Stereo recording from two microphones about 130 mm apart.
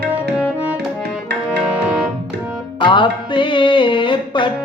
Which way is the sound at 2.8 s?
40° left (ahead or behind).